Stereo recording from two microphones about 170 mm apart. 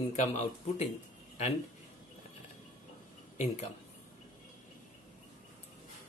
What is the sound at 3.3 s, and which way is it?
Speech, 40° left (ahead or behind).